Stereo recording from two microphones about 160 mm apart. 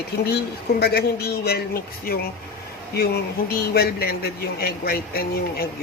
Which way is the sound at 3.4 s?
75° left (ahead or behind).